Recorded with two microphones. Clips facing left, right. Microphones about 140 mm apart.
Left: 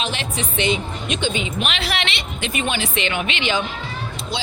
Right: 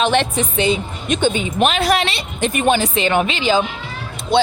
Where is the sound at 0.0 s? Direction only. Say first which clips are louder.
Right 9 dB; 55° right (ahead or behind).